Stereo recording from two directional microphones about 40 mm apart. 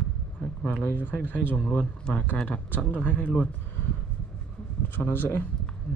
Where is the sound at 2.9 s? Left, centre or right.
Left.